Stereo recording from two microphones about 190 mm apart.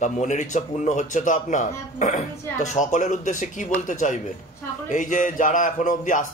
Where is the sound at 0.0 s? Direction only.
40° left (ahead or behind).